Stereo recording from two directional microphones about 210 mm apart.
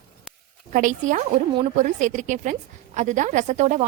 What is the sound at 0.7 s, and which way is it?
A woman's voice, 35° right (ahead or behind).